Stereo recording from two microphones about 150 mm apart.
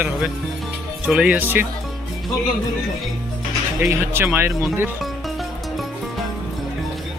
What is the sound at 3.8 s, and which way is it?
Speech, 15° right (ahead or behind).